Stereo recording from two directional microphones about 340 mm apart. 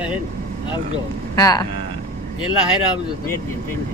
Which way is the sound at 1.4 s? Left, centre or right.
Centre.